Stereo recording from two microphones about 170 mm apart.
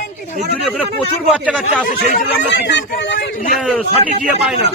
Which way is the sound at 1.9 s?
70° left (ahead or behind).